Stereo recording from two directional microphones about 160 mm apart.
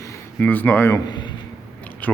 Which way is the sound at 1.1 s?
30° left (ahead or behind).